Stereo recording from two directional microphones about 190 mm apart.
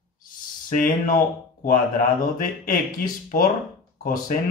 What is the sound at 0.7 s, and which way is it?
Speech, 45° left (ahead or behind).